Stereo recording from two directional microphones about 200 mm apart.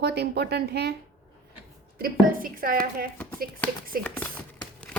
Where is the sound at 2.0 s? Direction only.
45° right (ahead or behind).